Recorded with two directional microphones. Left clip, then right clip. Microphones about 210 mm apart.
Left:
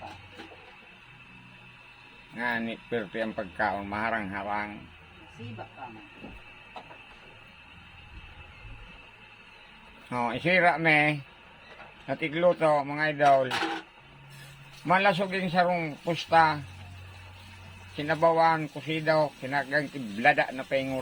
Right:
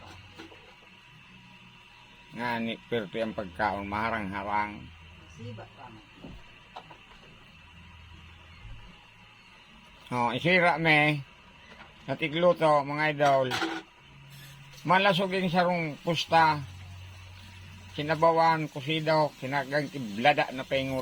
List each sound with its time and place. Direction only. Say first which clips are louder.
2.3 s speech: left 1 dB; 20° right (ahead or behind)
10.1 s speech: right 1 dB; 20° right (ahead or behind)
14.8 s speech: even; 20° right (ahead or behind)
17.9 s speech: even; 20° right (ahead or behind)